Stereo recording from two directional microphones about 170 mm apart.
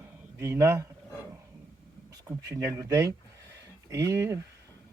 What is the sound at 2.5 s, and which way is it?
Speech, 20° right (ahead or behind).